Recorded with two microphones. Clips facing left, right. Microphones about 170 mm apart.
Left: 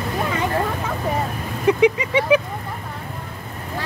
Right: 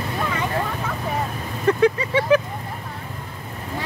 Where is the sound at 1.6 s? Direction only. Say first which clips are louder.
Left 1 dB; 15° left (ahead or behind).